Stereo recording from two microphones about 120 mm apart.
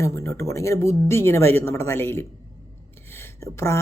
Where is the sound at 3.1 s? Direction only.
20° left (ahead or behind).